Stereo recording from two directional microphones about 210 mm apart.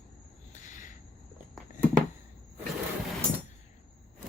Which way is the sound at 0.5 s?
35° left (ahead or behind).